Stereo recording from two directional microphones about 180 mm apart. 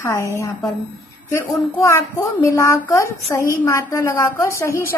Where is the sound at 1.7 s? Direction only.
20° left (ahead or behind).